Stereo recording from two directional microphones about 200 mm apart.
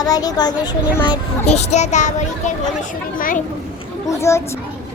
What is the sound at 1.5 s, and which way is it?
A child's voice, 35° left (ahead or behind).